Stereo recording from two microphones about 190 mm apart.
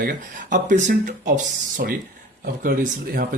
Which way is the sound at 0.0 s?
45° right (ahead or behind).